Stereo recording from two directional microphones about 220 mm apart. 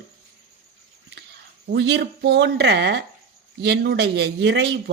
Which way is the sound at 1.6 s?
50° right (ahead or behind).